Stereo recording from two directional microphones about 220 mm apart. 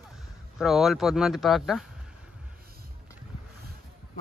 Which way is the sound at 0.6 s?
Centre (ahead or behind).